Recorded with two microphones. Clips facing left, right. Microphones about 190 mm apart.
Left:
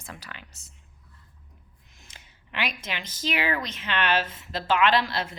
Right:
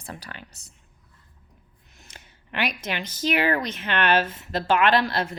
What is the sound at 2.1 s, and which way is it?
Speech, 50° right (ahead or behind).